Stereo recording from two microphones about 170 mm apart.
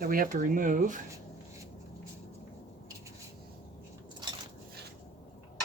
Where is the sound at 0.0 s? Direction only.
55° right (ahead or behind).